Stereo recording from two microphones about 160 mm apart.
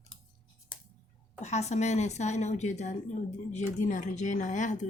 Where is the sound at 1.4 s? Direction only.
45° left (ahead or behind).